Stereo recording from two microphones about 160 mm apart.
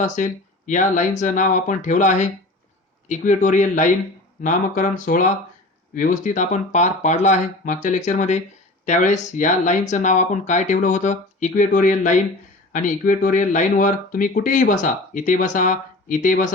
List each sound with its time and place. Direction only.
0.0 s speech: 50° left (ahead or behind)